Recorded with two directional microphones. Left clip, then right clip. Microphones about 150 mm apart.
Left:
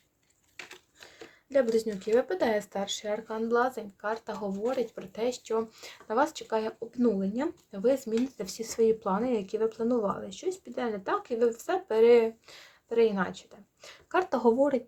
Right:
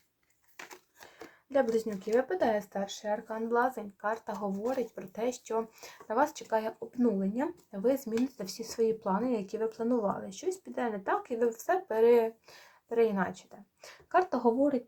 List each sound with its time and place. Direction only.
1.7 s speech: 20° left (ahead or behind); by 14.8 s 50° left (ahead or behind)